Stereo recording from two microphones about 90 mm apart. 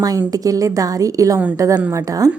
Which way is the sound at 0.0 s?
45° right (ahead or behind).